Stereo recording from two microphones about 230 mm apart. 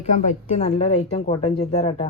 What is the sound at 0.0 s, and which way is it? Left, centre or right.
A woman's voice, left.